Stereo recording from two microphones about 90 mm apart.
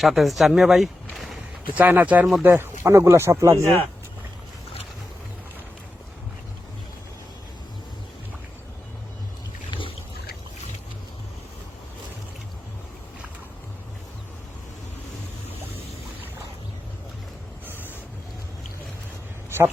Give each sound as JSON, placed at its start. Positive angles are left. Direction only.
{"t": 0.0, "sound": "speech", "side_deg": 0}
{"t": 1.7, "sound": "speech", "side_deg": -20}
{"t": 2.4, "sound": "speech", "side_deg": -30}
{"t": 17.7, "sound": "ocean", "side_deg": 25}
{"t": 19.5, "sound": "a sound", "side_deg": -30}